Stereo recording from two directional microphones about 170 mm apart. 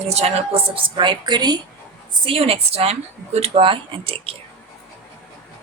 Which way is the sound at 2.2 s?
35° right (ahead or behind).